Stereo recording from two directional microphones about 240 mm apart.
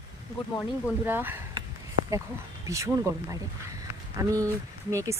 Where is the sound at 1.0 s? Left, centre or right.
Centre.